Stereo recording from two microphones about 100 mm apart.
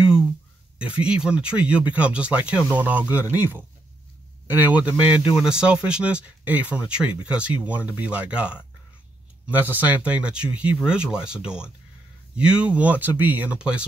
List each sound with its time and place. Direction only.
0.7 s speech: 10° right (ahead or behind)
4.8 s speech: 10° right (ahead or behind)